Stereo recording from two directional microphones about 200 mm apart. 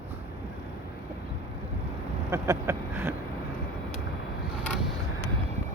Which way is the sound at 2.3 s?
15° right (ahead or behind).